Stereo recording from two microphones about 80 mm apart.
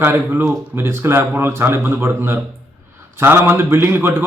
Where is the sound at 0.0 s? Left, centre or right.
Right.